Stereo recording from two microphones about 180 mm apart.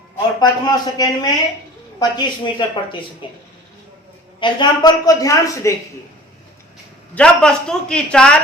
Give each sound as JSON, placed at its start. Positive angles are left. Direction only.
{"t": 0.3, "sound": "a woman's voice", "side_deg": 20}
{"t": 4.4, "sound": "a woman's voice", "side_deg": 25}
{"t": 7.2, "sound": "speech", "side_deg": 5}